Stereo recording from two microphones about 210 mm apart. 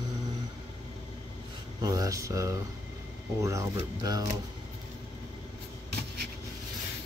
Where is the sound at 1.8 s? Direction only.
15° right (ahead or behind).